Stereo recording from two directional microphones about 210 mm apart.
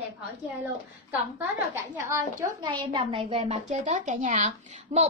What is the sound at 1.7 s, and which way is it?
A woman's voice, 10° right (ahead or behind).